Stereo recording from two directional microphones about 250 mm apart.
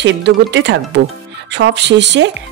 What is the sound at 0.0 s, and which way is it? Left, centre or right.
Speech, right.